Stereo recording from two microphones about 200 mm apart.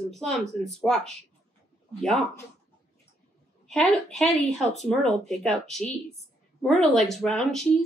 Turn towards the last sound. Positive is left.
turn(degrees=0)  # may be behind; listen again after turning